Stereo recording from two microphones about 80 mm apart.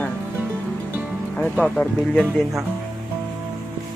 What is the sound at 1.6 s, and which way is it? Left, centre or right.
Speech, centre.